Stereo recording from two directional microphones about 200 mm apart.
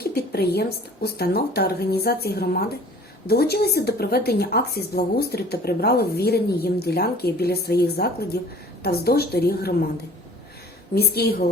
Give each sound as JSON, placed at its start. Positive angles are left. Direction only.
{"t": 0.1, "sound": "a woman's voice", "side_deg": 50}
{"t": 10.9, "sound": "a woman's voice", "side_deg": 50}